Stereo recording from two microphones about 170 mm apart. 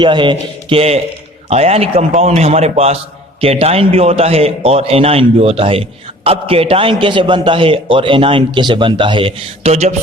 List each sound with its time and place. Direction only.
0.0 s a man's voice: 30° right (ahead or behind)